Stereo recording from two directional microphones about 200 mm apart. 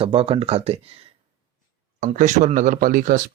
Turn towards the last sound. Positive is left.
turn(degrees=-45)  # may be behind; listen again after turning